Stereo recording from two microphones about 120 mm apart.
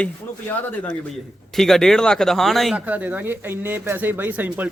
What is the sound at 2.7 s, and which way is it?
Speech, 15° right (ahead or behind).